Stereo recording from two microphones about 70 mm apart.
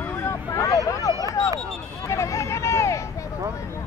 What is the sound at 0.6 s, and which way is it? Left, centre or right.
Vehicle, left.